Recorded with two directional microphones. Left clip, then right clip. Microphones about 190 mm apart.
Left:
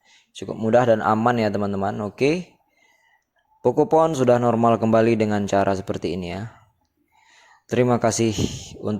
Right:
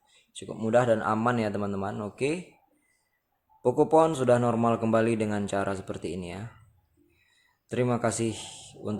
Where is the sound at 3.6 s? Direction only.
25° left (ahead or behind).